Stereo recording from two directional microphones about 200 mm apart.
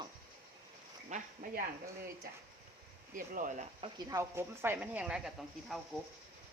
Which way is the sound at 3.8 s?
20° right (ahead or behind).